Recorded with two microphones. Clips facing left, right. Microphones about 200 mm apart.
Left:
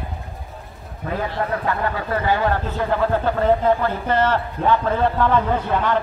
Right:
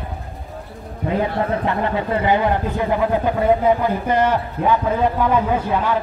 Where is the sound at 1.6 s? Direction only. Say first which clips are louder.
Right 3 dB; 20° right (ahead or behind).